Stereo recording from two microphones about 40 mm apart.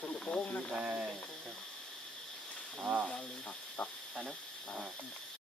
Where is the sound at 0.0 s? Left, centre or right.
Left.